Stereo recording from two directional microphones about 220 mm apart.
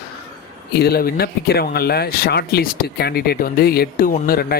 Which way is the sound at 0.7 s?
45° left (ahead or behind).